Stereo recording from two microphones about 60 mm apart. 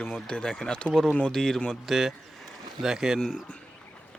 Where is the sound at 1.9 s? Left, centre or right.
Centre.